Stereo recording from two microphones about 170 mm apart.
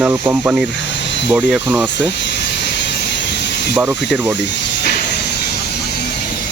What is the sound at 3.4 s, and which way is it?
Snake, 90° left.